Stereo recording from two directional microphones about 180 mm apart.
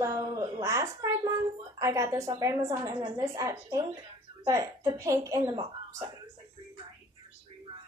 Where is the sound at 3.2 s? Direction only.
15° right (ahead or behind).